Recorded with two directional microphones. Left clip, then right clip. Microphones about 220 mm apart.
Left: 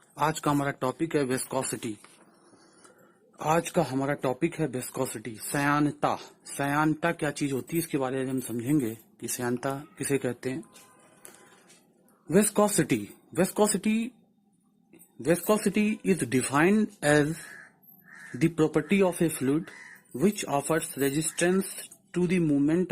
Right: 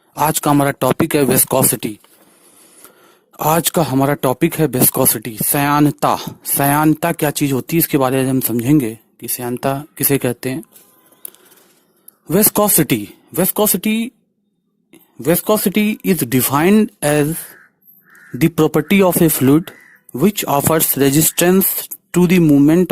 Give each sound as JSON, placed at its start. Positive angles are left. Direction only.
{"t": 0.1, "sound": "speech", "side_deg": -40}
{"t": 3.3, "sound": "speech", "side_deg": -45}
{"t": 12.3, "sound": "speech", "side_deg": -45}
{"t": 15.2, "sound": "speech", "side_deg": -45}
{"t": 18.3, "sound": "speech", "side_deg": -50}